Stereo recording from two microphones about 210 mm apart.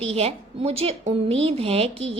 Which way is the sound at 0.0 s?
30° right (ahead or behind).